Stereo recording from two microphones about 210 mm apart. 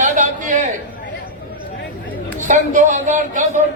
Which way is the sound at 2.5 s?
35° right (ahead or behind).